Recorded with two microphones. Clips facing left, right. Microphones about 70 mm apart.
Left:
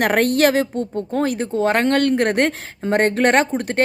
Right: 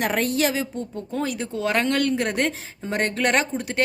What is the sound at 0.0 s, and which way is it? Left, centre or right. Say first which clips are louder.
Speech: left 7 dB; left.